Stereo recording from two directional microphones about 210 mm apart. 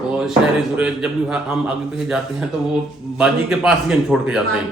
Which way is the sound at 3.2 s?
5° right (ahead or behind).